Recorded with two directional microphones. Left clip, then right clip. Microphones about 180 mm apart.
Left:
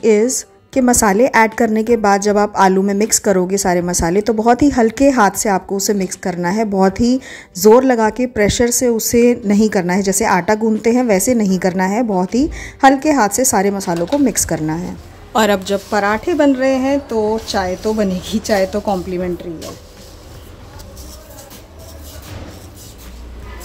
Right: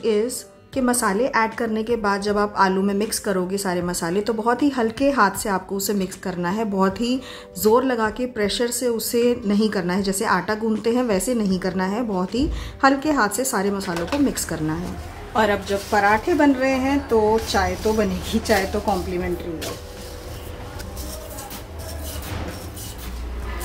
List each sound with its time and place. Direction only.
0.0 s a woman's voice: 40° left (ahead or behind)
6.9 s speech: 90° left
7.8 s a woman's voice: 35° left (ahead or behind)
15.3 s a woman's voice: 80° left; by 18.9 s 55° left (ahead or behind)